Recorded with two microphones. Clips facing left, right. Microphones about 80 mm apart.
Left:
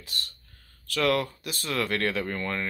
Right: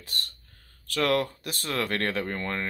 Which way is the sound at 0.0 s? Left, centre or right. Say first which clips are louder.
Right 1 dB; right.